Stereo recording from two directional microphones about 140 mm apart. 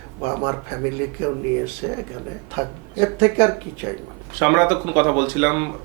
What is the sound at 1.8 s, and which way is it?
Speech, 15° right (ahead or behind).